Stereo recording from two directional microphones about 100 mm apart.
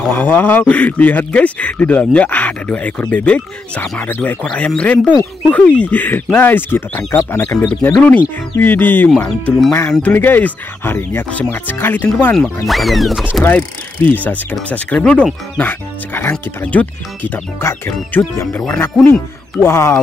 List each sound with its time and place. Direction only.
0.1 s a man's voice: 20° left (ahead or behind)
12.6 s speech: centre (ahead or behind)
13.3 s a man's voice: 15° left (ahead or behind)
19.6 s speech: 25° left (ahead or behind)